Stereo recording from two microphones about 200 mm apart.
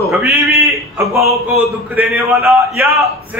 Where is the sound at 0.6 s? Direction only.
15° right (ahead or behind).